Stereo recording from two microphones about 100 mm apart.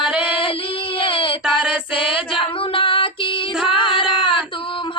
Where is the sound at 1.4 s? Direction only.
10° right (ahead or behind).